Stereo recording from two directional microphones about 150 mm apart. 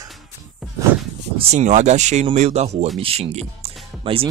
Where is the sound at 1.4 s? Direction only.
50° right (ahead or behind).